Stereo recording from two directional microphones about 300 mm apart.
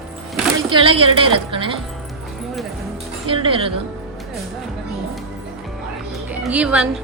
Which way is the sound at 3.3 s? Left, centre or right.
Centre.